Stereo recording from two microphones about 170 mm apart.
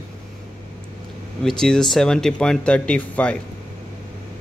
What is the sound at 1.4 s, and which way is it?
Speech, 5° left (ahead or behind).